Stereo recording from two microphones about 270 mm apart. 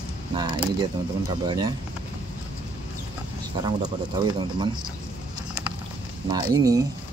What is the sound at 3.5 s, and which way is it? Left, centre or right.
Speech, centre.